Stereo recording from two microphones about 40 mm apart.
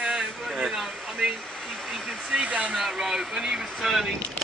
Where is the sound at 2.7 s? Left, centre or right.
Centre.